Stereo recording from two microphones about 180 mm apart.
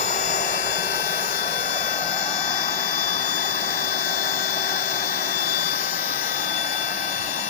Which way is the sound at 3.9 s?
45° left (ahead or behind).